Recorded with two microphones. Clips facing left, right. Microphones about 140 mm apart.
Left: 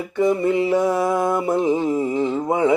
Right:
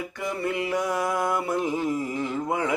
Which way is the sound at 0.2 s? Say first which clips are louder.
Left 11 dB; 25° left (ahead or behind).